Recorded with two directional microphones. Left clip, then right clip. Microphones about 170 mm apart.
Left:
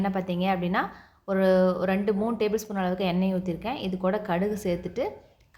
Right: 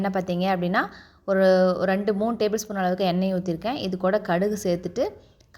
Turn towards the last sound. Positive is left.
turn(degrees=-35)  # may be behind; listen again after turning